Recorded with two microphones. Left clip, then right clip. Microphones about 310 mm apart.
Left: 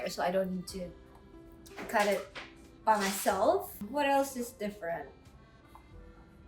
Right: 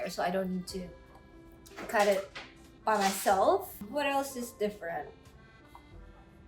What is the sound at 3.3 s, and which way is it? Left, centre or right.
Speech, centre.